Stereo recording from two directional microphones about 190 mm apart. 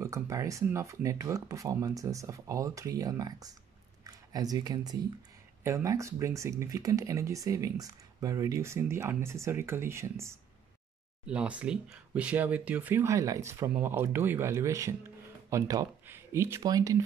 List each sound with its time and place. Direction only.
0.0 s speech: 15° right (ahead or behind)
4.0 s a sound: 20° right (ahead or behind)
5.6 s speech: 15° right (ahead or behind)